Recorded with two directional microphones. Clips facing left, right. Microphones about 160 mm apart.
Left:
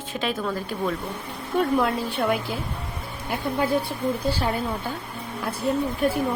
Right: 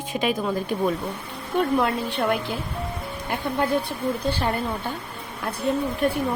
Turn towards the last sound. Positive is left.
turn(degrees=0)  # may be behind; listen again after turning